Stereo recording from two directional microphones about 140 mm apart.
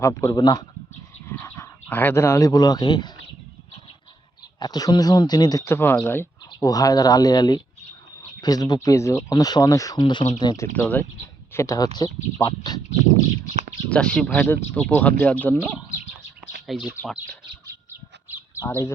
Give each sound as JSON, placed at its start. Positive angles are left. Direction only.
{"t": 0.0, "sound": "speech", "side_deg": 20}
{"t": 4.6, "sound": "speech", "side_deg": 30}
{"t": 10.8, "sound": "speech", "side_deg": 10}
{"t": 11.5, "sound": "speech", "side_deg": 20}
{"t": 13.9, "sound": "speech", "side_deg": 10}
{"t": 16.6, "sound": "speech", "side_deg": -5}
{"t": 18.5, "sound": "speech", "side_deg": 20}